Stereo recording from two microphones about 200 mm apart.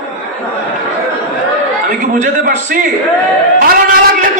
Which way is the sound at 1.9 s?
40° right (ahead or behind).